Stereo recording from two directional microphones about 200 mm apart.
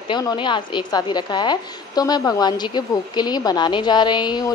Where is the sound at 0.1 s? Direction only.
20° left (ahead or behind).